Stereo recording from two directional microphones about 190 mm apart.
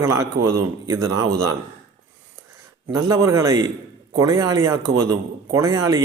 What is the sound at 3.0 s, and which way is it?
Speech, 20° right (ahead or behind).